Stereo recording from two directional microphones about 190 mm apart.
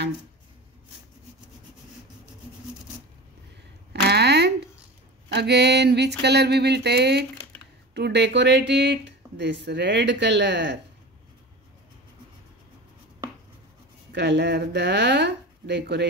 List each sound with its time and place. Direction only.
3.9 s a sound: 60° right (ahead or behind)
5.3 s speech: 60° right (ahead or behind)
14.1 s speech: 65° right (ahead or behind)